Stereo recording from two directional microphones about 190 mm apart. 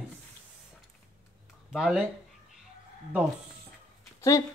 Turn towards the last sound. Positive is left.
turn(degrees=15)  # may be behind; listen again after turning